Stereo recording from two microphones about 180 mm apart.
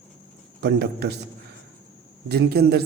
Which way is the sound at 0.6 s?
65° right (ahead or behind).